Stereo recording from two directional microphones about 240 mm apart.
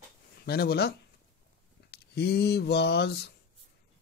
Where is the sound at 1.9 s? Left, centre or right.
Left.